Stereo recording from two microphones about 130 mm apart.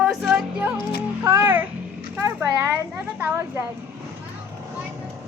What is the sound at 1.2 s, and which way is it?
A child's voice, 15° right (ahead or behind).